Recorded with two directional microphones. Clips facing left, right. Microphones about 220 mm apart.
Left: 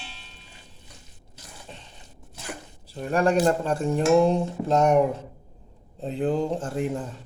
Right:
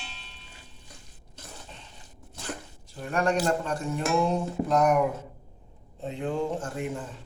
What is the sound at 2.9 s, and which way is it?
Speech, 35° left (ahead or behind).